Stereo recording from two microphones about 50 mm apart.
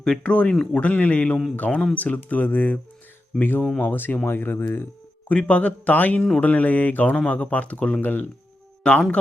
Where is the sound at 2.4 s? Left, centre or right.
Left.